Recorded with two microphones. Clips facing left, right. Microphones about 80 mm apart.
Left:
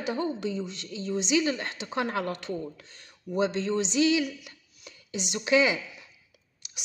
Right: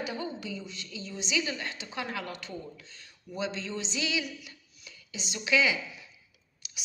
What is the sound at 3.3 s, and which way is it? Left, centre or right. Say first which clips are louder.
Speech: left 8 dB; left.